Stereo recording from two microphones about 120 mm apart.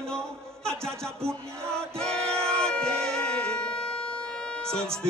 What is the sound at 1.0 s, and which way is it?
Speech, 20° right (ahead or behind).